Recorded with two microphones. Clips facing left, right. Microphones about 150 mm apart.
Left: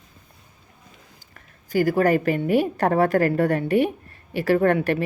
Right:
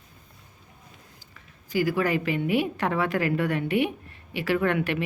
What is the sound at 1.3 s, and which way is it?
A woman's voice, 50° left (ahead or behind).